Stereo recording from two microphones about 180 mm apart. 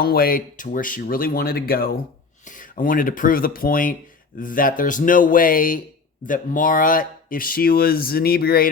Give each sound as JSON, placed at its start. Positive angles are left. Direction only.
{"t": 0.0, "sound": "speech", "side_deg": 55}